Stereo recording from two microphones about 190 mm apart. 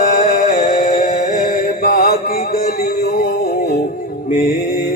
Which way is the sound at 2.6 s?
45° left (ahead or behind).